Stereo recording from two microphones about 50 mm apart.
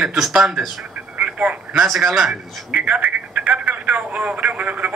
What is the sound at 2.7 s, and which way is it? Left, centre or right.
Speech, right.